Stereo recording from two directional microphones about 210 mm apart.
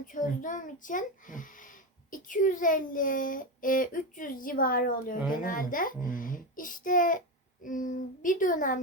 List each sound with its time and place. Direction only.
0.0 s a child's voice: 40° left (ahead or behind)